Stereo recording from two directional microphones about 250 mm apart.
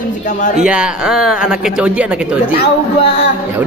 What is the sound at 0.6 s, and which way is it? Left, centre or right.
Speech, centre.